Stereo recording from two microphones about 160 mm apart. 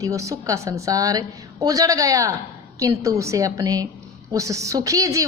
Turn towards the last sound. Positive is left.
turn(degrees=-20)  # may be behind; listen again after turning